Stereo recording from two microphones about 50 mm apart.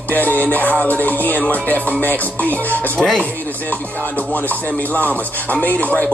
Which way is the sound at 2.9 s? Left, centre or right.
Centre.